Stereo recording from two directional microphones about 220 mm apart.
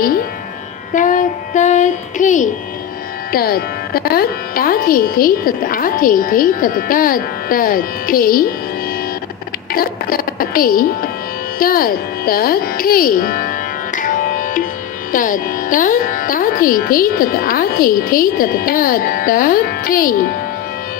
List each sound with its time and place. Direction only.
0.9 s a child's voice: 35° left (ahead or behind)
9.7 s a woman's voice: 40° left (ahead or behind)
11.6 s music: 40° left (ahead or behind)
15.1 s speech: 40° left (ahead or behind)